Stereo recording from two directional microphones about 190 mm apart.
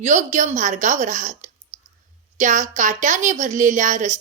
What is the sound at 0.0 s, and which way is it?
Speech, 40° right (ahead or behind).